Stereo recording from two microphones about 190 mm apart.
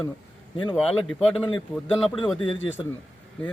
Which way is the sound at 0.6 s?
25° left (ahead or behind).